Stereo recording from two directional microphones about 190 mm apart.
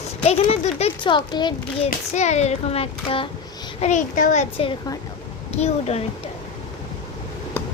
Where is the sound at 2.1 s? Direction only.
35° left (ahead or behind).